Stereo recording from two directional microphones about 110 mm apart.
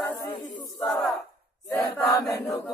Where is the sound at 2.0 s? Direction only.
30° left (ahead or behind).